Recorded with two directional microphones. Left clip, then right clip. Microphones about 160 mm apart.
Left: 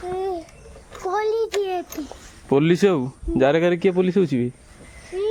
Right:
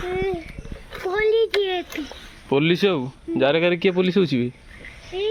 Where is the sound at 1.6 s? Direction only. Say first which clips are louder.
Right 1 dB; 25° left (ahead or behind).